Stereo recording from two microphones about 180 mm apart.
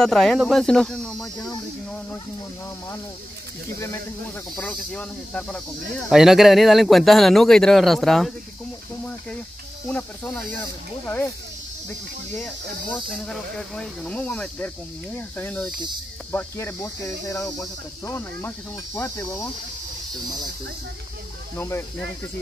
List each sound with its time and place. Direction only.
0.0 s speech: centre (ahead or behind)
4.6 s speech: 5° left (ahead or behind)
9.8 s speech: 10° left (ahead or behind)
12.4 s speech: 5° left (ahead or behind)
21.5 s speech: 15° left (ahead or behind)